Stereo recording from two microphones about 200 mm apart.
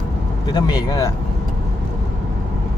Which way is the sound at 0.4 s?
20° left (ahead or behind).